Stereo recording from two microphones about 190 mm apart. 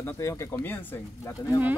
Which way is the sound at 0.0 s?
15° left (ahead or behind).